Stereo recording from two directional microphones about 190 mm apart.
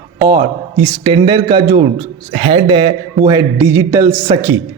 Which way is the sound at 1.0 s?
25° right (ahead or behind).